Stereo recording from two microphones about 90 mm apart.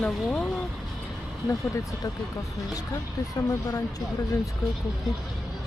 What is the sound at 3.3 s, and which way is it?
Speech, 40° left (ahead or behind).